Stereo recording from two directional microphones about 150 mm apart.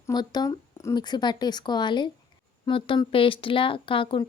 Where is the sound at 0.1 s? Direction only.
25° left (ahead or behind).